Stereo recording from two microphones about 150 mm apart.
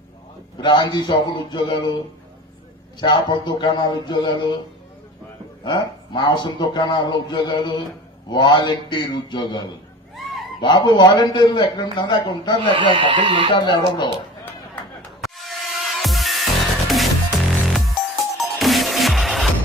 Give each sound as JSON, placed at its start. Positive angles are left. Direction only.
{"t": 0.6, "sound": "a man's voice", "side_deg": 30}
{"t": 3.0, "sound": "a man's voice", "side_deg": 30}
{"t": 5.6, "sound": "a man's voice", "side_deg": 30}
{"t": 12.6, "sound": "speech", "side_deg": -35}
{"t": 13.5, "sound": "a man's voice", "side_deg": 30}
{"t": 15.0, "sound": "music", "side_deg": 0}